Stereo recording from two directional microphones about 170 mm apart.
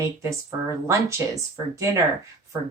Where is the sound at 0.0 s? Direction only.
20° right (ahead or behind).